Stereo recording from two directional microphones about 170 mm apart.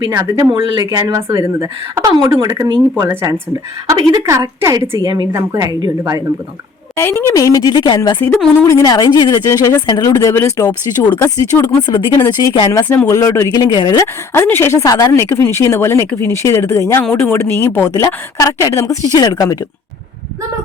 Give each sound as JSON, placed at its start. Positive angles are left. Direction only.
{"t": 0.2, "sound": "a woman's voice", "side_deg": -20}
{"t": 6.9, "sound": "speech", "side_deg": 15}
{"t": 11.8, "sound": "speech", "side_deg": 25}
{"t": 14.3, "sound": "speech", "side_deg": 15}